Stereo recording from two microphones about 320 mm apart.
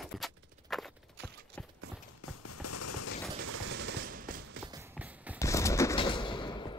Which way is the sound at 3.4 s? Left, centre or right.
Right.